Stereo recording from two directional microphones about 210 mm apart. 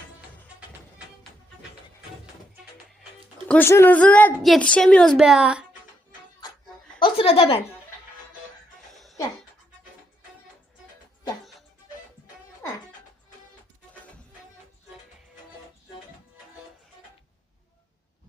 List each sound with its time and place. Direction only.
3.5 s a woman's voice: 10° left (ahead or behind); by 5.6 s 5° right (ahead or behind)
7.0 s a sound: 25° left (ahead or behind)
8.9 s laughter: centre (ahead or behind)